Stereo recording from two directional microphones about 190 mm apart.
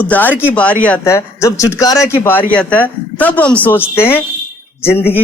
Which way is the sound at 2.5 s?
5° left (ahead or behind).